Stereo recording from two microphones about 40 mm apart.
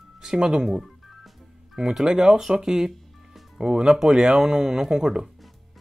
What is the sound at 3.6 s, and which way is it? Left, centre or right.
Speech, centre.